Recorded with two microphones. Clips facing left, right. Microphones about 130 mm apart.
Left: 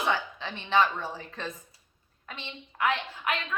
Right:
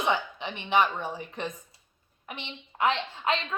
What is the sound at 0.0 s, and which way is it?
A woman's voice, 20° right (ahead or behind).